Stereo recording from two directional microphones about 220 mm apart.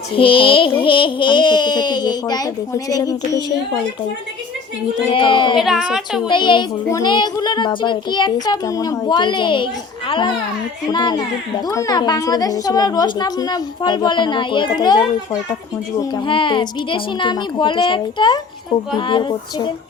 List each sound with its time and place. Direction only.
0.1 s speech: 25° left (ahead or behind)
5.0 s speech: 20° left (ahead or behind)
5.5 s speech: centre (ahead or behind)
6.2 s a woman's voice: 20° left (ahead or behind)